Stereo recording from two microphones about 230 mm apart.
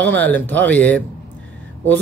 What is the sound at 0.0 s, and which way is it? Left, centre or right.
A man's voice, centre.